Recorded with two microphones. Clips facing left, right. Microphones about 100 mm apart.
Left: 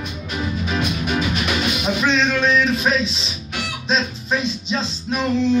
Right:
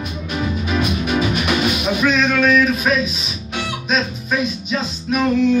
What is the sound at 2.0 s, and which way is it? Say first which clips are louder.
Male singing: right 3 dB; 30° left (ahead or behind).